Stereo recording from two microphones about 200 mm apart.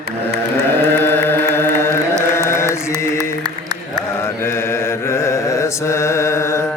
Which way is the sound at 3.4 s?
20° right (ahead or behind).